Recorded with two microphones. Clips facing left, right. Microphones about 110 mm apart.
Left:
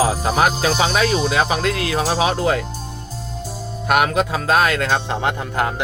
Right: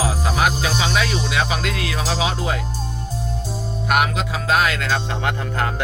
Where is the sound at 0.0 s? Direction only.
45° left (ahead or behind).